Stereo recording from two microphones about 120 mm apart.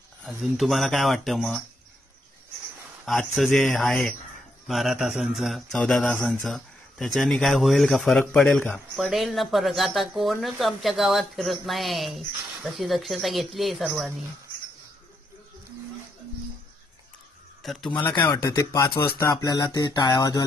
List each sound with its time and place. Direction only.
0.3 s speech: centre (ahead or behind)
3.1 s speech: centre (ahead or behind)
17.6 s speech: centre (ahead or behind)
18.3 s speech: 30° left (ahead or behind)
19.3 s speech: 35° left (ahead or behind)